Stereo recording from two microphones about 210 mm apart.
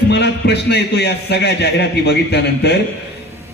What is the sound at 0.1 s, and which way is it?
A man's voice, 50° left (ahead or behind).